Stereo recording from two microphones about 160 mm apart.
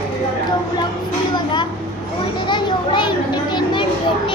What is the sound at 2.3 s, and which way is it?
Children playing, 30° left (ahead or behind).